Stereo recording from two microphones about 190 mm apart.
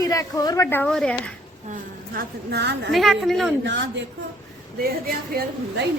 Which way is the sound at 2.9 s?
Centre (ahead or behind).